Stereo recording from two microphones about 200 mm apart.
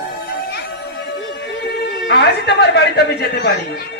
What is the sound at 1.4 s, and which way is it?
A man's voice, 55° left (ahead or behind).